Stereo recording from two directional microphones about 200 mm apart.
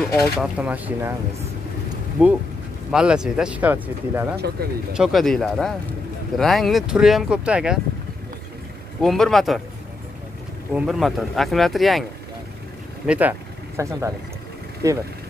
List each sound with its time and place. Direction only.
0.4 s speech: 5° right (ahead or behind)
2.2 s speech: 5° right (ahead or behind)
4.6 s speech: 50° right (ahead or behind)
4.9 s speech: centre (ahead or behind)
9.0 s speech: centre (ahead or behind)
10.7 s speech: 5° right (ahead or behind)